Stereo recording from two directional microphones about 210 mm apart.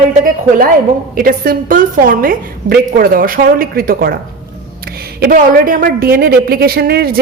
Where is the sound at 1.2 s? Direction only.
45° right (ahead or behind).